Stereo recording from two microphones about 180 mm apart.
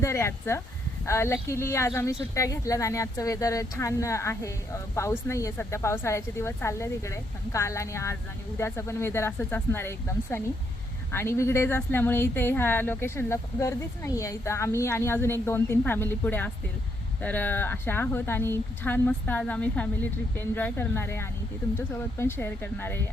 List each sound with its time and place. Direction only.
0.0 s speech: 15° left (ahead or behind)